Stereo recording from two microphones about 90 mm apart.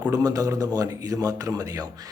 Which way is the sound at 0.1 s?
40° right (ahead or behind).